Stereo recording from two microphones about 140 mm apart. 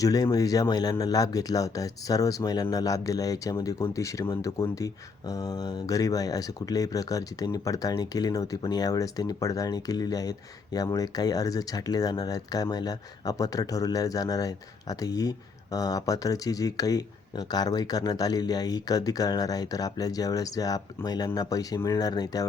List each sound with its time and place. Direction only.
0.0 s speech: 25° left (ahead or behind)